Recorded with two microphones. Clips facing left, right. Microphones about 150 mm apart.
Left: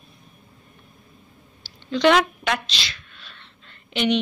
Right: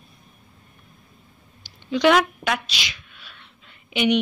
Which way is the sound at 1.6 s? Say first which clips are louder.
Even; 10° right (ahead or behind).